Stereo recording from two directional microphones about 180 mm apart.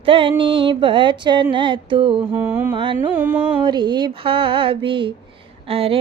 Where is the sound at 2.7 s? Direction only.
30° right (ahead or behind).